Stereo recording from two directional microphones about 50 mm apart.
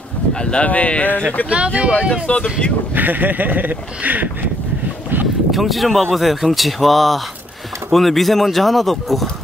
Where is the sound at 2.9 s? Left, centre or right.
Right.